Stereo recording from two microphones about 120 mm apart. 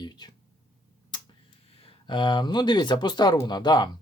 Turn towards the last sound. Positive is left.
turn(degrees=35)  # may be behind; listen again after turning